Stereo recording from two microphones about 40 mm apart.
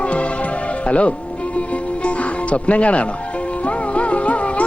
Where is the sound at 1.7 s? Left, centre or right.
Left.